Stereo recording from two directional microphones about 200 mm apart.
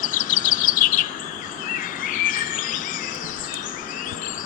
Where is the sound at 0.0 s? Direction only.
40° left (ahead or behind).